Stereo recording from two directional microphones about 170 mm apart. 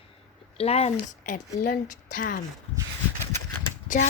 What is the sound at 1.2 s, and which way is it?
Speech, 50° left (ahead or behind).